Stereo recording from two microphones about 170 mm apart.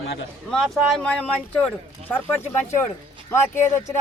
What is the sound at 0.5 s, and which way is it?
Speech, 5° left (ahead or behind).